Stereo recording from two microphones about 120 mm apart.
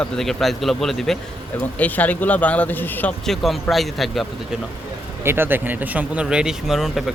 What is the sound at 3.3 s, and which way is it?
A man's voice, centre (ahead or behind).